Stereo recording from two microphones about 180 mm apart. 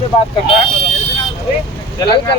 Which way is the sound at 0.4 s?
30° left (ahead or behind).